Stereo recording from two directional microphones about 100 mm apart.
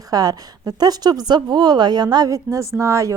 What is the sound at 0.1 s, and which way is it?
A woman's voice, 40° right (ahead or behind).